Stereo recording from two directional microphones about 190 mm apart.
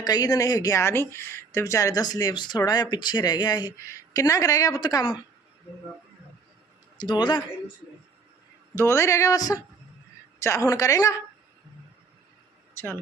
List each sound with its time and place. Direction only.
0.0 s speech: 20° left (ahead or behind)
7.0 s speech: 25° left (ahead or behind)
8.7 s speech: 15° left (ahead or behind)